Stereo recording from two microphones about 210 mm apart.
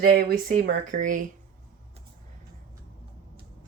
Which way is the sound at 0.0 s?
45° right (ahead or behind).